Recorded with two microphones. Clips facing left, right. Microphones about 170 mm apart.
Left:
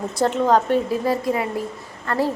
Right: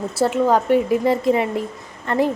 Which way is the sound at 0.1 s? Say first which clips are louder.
Right 1 dB; 5° right (ahead or behind).